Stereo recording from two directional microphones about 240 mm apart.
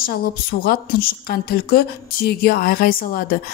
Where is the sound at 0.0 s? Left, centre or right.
Left.